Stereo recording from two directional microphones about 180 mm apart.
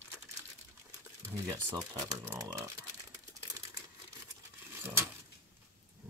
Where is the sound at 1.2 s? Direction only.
15° right (ahead or behind).